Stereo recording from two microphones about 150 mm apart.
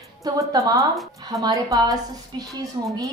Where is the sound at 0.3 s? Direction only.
20° right (ahead or behind).